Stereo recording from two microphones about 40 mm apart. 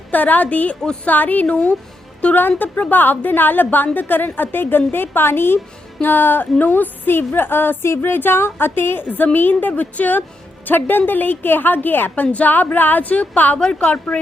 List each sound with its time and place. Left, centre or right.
0.1 s a woman's voice: left
2.2 s speech: left
2.6 s a woman's voice: left
9.0 s a woman's voice: left
13.7 s speech: left